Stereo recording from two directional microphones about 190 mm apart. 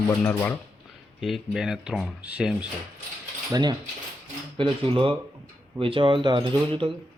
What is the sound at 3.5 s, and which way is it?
Speech, 20° right (ahead or behind).